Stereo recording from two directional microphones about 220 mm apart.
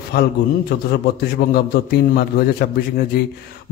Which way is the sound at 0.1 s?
45° left (ahead or behind).